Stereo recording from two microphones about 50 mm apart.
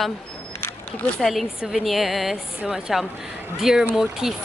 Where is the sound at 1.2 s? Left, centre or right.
Centre.